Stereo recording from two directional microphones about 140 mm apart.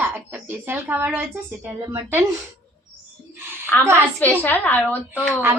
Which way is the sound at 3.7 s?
15° left (ahead or behind).